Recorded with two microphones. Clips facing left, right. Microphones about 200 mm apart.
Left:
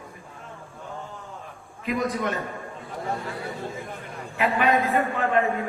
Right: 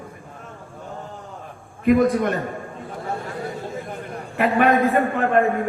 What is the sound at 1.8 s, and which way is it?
Speech, 55° right (ahead or behind).